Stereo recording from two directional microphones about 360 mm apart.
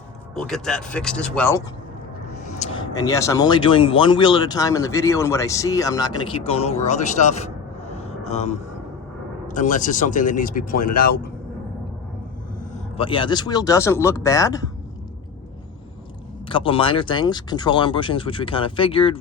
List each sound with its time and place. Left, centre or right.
0.3 s speech: centre
2.4 s speech: centre
7.9 s a sound: centre
8.3 s speech: centre
12.5 s speech: centre
16.5 s speech: centre